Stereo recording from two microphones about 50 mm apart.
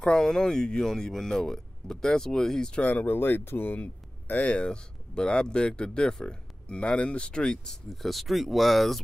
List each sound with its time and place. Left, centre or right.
0.0 s speech: centre
2.8 s speech: left
3.8 s speech: left; by 7.8 s centre
7.9 s speech: centre